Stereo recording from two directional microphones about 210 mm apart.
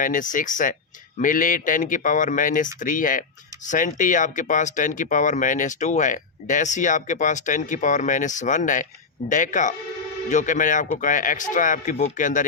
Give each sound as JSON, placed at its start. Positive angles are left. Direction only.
{"t": 0.0, "sound": "speech", "side_deg": 40}